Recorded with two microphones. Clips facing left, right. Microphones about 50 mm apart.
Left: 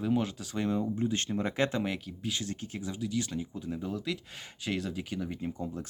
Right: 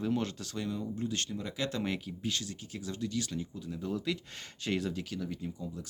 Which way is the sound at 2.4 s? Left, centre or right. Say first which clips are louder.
Left 4 dB; left.